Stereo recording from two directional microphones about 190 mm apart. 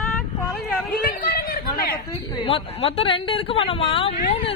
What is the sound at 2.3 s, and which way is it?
Speech, 25° left (ahead or behind).